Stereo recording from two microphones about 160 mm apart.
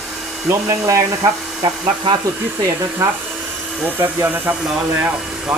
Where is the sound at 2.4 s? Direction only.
15° right (ahead or behind).